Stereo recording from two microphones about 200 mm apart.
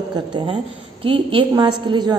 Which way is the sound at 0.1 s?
20° right (ahead or behind).